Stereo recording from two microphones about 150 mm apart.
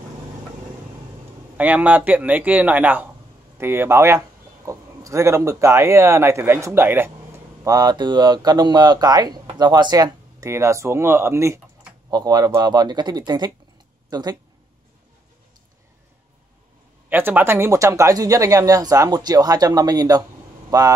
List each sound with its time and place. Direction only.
1.6 s speech: 10° right (ahead or behind)
7.6 s speech: 25° right (ahead or behind)
17.1 s speech: 15° right (ahead or behind)